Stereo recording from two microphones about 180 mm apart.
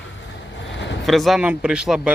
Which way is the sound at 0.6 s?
85° left.